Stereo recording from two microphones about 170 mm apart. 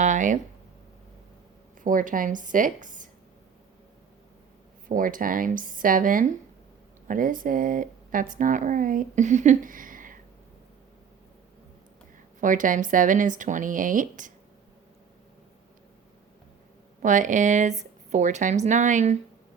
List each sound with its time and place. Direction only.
0.0 s speech: 50° right (ahead or behind)
1.8 s speech: 55° right (ahead or behind)
4.9 s speech: 55° right (ahead or behind)
12.4 s speech: 50° right (ahead or behind)
17.0 s speech: 50° right (ahead or behind)